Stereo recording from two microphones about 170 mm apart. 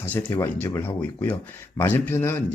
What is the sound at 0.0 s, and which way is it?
Speech, 10° left (ahead or behind).